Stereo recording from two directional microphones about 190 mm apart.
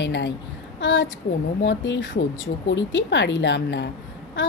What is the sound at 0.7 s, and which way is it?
A woman's voice, 75° left (ahead or behind).